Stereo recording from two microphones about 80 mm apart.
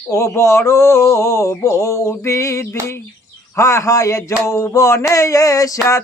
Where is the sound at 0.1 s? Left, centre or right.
Left.